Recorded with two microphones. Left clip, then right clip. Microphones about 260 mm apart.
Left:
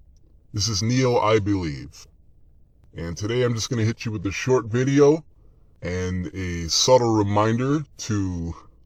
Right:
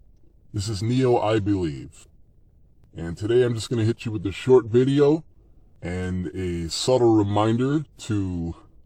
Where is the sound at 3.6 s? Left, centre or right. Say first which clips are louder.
Right 1 dB; left.